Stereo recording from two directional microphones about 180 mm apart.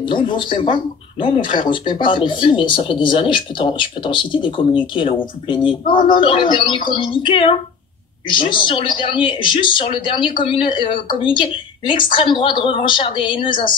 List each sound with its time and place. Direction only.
0.0 s speech: 25° left (ahead or behind)